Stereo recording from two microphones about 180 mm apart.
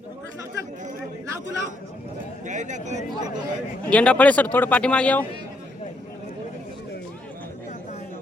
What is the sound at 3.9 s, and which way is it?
A man's voice, 5° left (ahead or behind).